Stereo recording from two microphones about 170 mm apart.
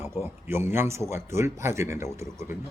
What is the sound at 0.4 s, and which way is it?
Speech, 15° right (ahead or behind).